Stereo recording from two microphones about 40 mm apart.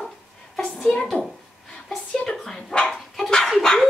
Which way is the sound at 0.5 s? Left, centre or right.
Centre.